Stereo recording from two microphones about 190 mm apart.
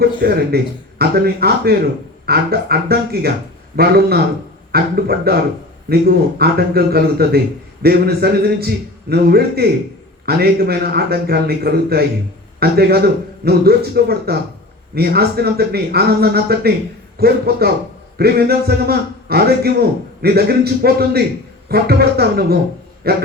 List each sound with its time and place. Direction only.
0.0 s a man's voice: 55° right (ahead or behind)